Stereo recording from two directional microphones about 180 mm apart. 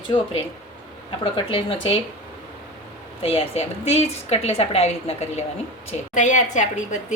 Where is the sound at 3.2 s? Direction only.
30° left (ahead or behind).